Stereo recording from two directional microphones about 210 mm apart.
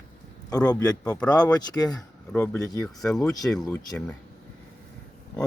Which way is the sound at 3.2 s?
15° left (ahead or behind).